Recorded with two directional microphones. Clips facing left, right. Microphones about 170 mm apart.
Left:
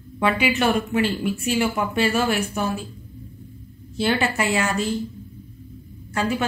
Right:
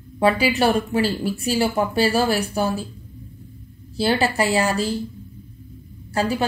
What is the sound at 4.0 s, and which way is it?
Speech, 35° right (ahead or behind).